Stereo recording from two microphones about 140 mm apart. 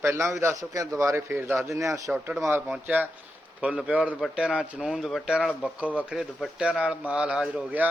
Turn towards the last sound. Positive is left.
turn(degrees=-10)  # may be behind; listen again after turning